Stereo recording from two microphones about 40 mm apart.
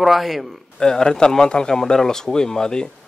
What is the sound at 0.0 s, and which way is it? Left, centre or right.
Speech, centre.